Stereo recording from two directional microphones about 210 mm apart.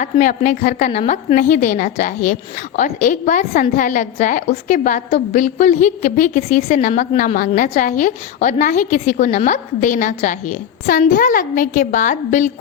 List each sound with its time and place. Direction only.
0.0 s a woman's voice: 35° left (ahead or behind)